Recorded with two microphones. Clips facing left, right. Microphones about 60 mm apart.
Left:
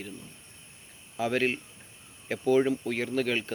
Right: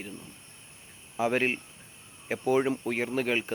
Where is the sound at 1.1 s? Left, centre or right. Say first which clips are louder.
Right 1 dB; right.